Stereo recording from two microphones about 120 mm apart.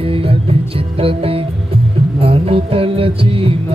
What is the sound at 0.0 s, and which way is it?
Music, 50° right (ahead or behind).